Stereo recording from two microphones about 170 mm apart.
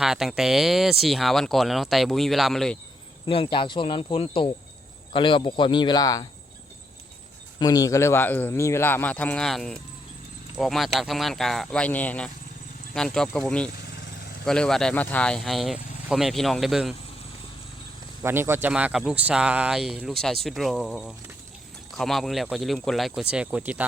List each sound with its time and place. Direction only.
0.0 s speech: centre (ahead or behind)
3.2 s speech: 30° left (ahead or behind)
7.6 s speech: 20° left (ahead or behind); by 16.9 s centre (ahead or behind)
18.2 s speech: 15° right (ahead or behind)